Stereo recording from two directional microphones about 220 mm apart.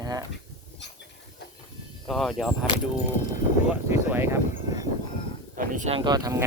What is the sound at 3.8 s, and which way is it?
Speech, 10° right (ahead or behind).